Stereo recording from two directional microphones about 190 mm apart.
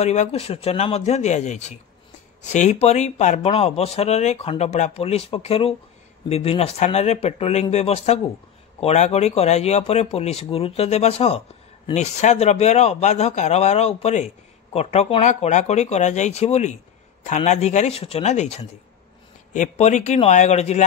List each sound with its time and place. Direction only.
0.0 s speech: 35° left (ahead or behind)